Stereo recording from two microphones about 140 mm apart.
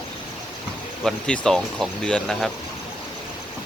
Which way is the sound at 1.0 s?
5° left (ahead or behind).